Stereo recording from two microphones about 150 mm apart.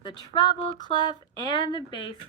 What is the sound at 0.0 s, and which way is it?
Speech, 30° left (ahead or behind).